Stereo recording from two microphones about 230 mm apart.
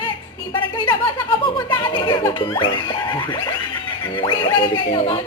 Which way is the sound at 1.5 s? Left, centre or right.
Centre.